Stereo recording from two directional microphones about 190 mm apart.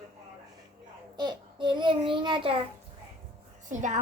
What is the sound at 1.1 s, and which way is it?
Child singing, 25° right (ahead or behind).